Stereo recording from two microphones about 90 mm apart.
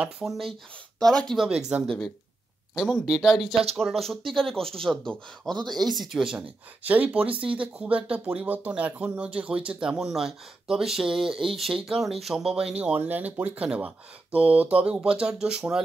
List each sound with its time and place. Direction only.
0.0 s speech: 5° right (ahead or behind)
5.9 s speech: 5° right (ahead or behind)
6.8 s speech: 15° right (ahead or behind)